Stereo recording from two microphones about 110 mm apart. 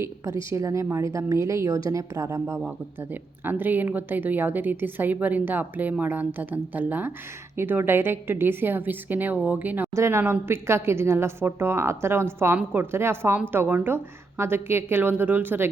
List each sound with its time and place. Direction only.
0.0 s speech: 25° right (ahead or behind)
2.6 s speech: 15° right (ahead or behind)